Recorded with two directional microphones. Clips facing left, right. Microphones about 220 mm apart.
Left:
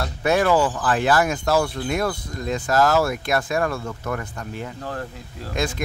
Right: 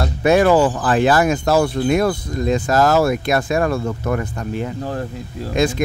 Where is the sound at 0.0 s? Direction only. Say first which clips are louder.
Right 6 dB; 20° right (ahead or behind).